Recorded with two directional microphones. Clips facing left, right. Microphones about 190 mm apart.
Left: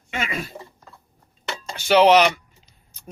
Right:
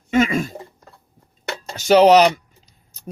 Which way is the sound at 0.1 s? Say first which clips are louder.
Right 11 dB; 45° right (ahead or behind).